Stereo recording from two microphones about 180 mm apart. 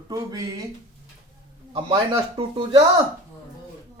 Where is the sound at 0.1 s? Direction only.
20° right (ahead or behind).